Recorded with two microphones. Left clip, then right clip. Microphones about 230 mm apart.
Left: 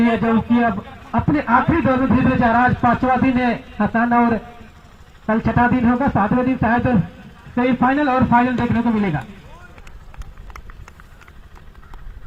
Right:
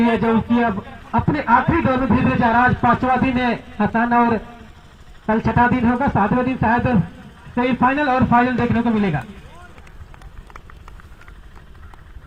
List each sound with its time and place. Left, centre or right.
0.0 s a man's voice: right